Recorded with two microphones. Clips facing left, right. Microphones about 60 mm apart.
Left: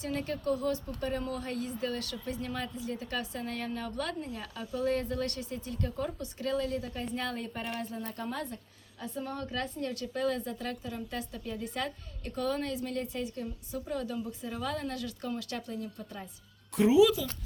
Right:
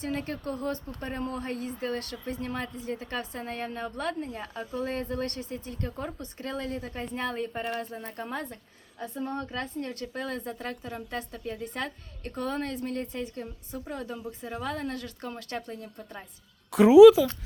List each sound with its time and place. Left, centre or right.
0.1 s speech: right
16.7 s speech: right